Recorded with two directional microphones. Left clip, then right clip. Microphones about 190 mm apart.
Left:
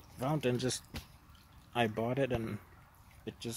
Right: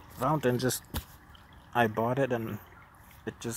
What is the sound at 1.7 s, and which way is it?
Speech, 5° left (ahead or behind).